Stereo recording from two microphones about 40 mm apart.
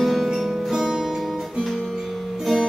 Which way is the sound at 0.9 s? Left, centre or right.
Centre.